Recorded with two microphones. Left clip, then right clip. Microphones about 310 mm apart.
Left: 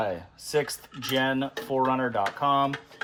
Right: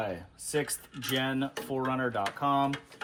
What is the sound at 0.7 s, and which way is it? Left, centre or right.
Speech, centre.